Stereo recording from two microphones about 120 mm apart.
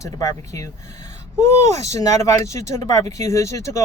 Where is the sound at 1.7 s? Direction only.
25° left (ahead or behind).